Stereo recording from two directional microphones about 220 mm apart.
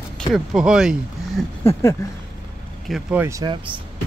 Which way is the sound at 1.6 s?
15° left (ahead or behind).